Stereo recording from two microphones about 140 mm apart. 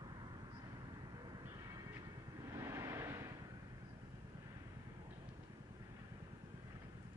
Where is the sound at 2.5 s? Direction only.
20° right (ahead or behind).